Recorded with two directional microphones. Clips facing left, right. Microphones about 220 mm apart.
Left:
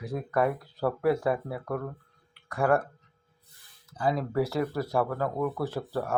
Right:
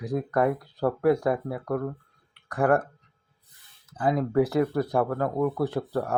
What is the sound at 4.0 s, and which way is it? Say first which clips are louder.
Speech: right 4 dB; 20° right (ahead or behind).